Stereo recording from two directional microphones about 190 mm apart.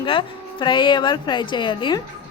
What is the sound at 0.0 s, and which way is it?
A woman's voice, 25° left (ahead or behind).